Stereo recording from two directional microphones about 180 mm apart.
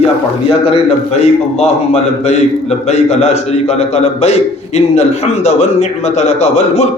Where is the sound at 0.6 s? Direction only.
35° left (ahead or behind).